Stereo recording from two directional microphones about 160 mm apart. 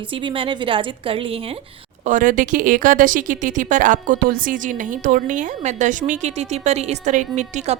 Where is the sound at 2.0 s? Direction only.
50° right (ahead or behind).